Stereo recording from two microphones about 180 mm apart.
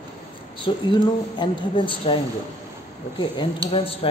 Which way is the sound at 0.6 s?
25° left (ahead or behind).